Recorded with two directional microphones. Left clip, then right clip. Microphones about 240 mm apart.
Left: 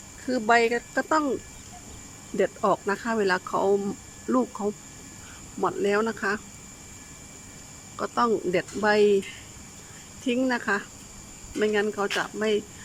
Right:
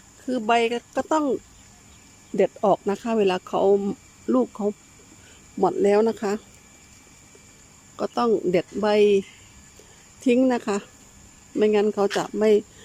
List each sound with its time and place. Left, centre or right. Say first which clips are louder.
0.3 s speech: even; centre
2.4 s speech: right 4 dB; centre
7.9 s speech: right 2 dB; centre
10.2 s speech: right 5 dB; centre